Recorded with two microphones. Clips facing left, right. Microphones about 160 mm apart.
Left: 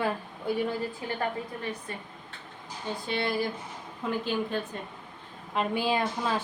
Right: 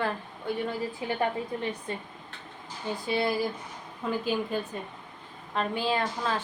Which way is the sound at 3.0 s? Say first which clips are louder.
Right 2 dB; 5° right (ahead or behind).